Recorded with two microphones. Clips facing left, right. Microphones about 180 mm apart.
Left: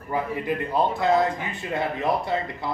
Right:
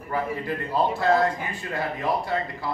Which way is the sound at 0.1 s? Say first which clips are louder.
Left 2 dB; 15° left (ahead or behind).